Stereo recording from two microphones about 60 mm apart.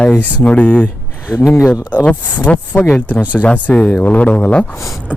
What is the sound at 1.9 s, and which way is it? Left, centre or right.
Speech, left.